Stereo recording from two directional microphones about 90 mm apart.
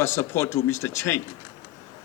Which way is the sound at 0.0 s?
30° left (ahead or behind).